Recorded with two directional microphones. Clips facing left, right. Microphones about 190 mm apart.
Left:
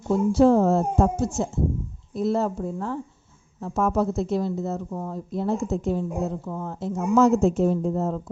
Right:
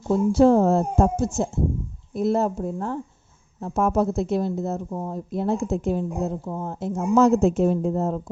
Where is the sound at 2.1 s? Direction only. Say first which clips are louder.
Right 2 dB; 50° right (ahead or behind).